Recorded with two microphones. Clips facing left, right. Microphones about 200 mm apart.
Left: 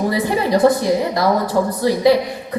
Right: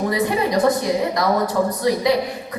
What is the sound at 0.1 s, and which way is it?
A woman's voice, 30° left (ahead or behind).